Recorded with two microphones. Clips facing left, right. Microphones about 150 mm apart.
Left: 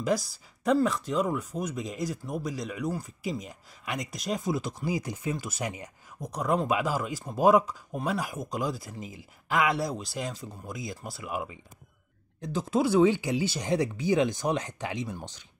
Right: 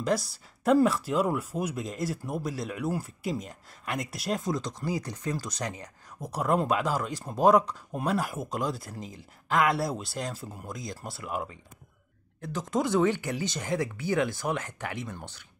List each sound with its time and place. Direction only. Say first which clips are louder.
0.0 s speech: even; centre (ahead or behind)
6.2 s speech: right 1 dB; 5° right (ahead or behind); by 15.2 s 15° left (ahead or behind)